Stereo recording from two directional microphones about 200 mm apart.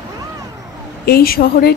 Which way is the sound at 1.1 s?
50° left (ahead or behind).